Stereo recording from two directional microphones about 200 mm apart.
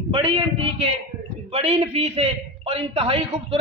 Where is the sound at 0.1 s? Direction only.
25° right (ahead or behind).